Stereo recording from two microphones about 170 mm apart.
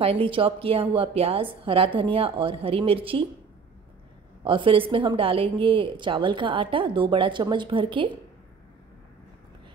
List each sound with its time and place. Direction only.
0.0 s a woman's voice: 35° right (ahead or behind)
4.5 s a woman's voice: 30° right (ahead or behind)